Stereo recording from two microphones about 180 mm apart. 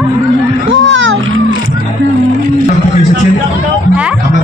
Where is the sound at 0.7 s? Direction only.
90° right.